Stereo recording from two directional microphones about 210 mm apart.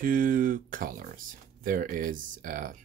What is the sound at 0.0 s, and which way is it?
Speech, 40° right (ahead or behind).